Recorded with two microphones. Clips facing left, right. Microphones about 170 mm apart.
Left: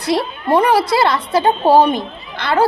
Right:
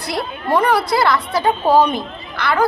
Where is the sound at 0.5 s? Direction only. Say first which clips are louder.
Left 2 dB; 20° left (ahead or behind).